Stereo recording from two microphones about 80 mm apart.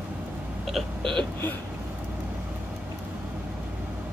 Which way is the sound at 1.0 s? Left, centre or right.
Right.